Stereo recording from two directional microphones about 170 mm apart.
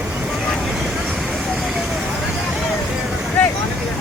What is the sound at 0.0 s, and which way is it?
Vehicle, 5° right (ahead or behind).